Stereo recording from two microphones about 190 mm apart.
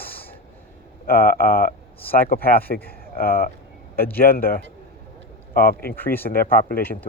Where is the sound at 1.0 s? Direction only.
50° left (ahead or behind).